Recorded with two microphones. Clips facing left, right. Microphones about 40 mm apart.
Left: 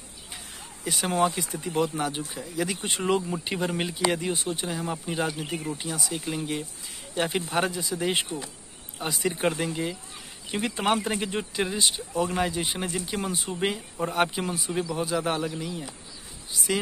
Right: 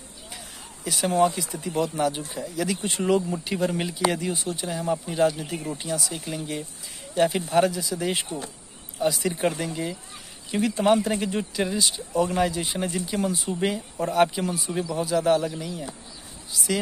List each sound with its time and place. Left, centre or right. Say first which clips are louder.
1.1 s speech: right 3 dB; left
1.6 s speech: right 2 dB; centre
4.6 s speech: right 3 dB; centre
16.6 s speech: right 1 dB; centre